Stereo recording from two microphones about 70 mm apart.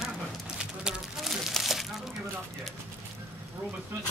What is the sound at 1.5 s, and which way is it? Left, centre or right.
Crumpling, centre.